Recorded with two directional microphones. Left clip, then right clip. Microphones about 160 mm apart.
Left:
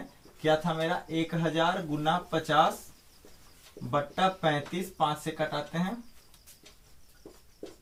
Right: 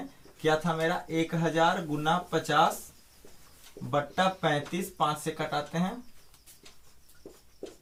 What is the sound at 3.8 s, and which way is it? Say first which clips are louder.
Speech: even; 5° left (ahead or behind).